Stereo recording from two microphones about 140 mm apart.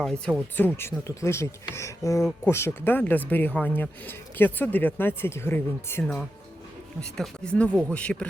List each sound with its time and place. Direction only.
0.0 s speech: 5° left (ahead or behind)